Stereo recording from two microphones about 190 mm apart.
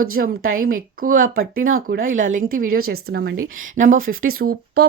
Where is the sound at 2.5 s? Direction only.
50° right (ahead or behind).